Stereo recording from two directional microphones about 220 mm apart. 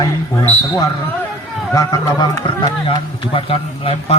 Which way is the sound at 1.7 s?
15° left (ahead or behind).